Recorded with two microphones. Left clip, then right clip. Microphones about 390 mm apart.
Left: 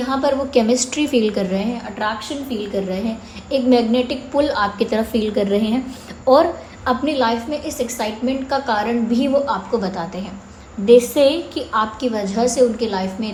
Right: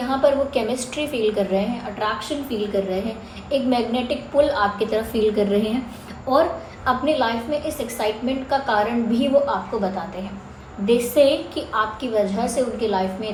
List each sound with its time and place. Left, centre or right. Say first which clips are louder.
0.2 s a woman's voice: left 1 dB; left
6.8 s a woman's voice: left 2 dB; left